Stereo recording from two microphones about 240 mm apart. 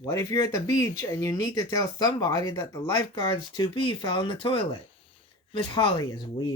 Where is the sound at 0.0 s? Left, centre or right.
Centre.